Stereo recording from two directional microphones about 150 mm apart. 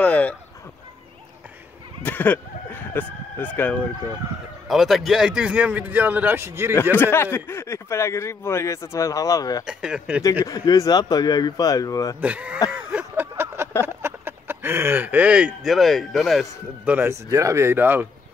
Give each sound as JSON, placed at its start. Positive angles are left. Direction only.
{"t": 0.0, "sound": "a sound", "side_deg": 10}
{"t": 2.0, "sound": "speech", "side_deg": 15}
{"t": 4.6, "sound": "a man's voice", "side_deg": 0}
{"t": 7.0, "sound": "speech", "side_deg": 15}
{"t": 9.7, "sound": "speech", "side_deg": -5}
{"t": 10.4, "sound": "speech", "side_deg": 25}
{"t": 12.2, "sound": "a man's voice", "side_deg": -10}
{"t": 12.7, "sound": "a sound", "side_deg": -10}
{"t": 13.8, "sound": "speech", "side_deg": -15}
{"t": 16.8, "sound": "a man's voice", "side_deg": -10}